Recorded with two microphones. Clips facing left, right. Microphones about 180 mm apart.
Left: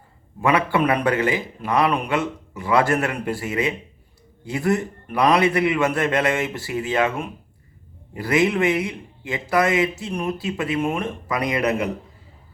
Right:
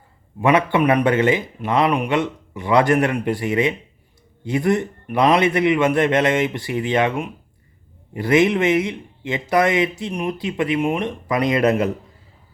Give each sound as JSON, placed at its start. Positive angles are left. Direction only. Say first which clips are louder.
{"t": 0.4, "sound": "speech", "louder": "right 3 dB", "side_deg": -20}